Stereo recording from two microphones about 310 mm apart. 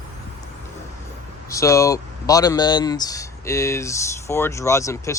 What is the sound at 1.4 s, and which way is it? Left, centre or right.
Speech, centre.